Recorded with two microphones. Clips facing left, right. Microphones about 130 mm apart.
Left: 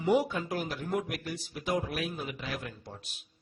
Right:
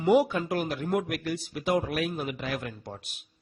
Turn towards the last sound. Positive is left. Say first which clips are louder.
# right 5 dB
turn(degrees=-60)  # may be behind; listen again after turning